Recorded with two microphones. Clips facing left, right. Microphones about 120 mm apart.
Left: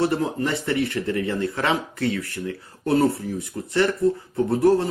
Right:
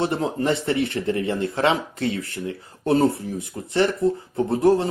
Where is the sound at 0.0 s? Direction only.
25° right (ahead or behind).